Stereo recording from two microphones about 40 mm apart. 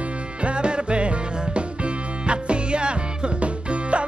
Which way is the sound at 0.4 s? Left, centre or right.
Right.